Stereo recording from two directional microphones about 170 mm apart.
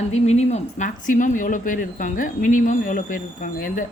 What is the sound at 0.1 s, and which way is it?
Speech, 40° left (ahead or behind).